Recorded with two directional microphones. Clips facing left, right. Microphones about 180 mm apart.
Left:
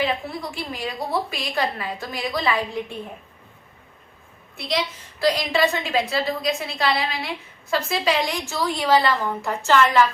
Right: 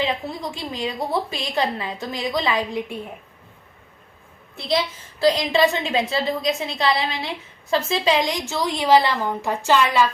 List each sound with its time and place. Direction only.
0.0 s a woman's voice: 20° right (ahead or behind)
5.2 s a woman's voice: 20° right (ahead or behind)